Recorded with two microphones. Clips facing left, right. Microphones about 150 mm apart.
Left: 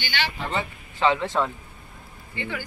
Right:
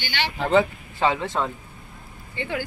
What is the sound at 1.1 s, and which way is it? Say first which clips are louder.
Speech: left 3 dB; 5° right (ahead or behind).